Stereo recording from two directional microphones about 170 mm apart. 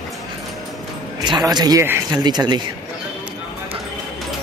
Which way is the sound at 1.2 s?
25° right (ahead or behind).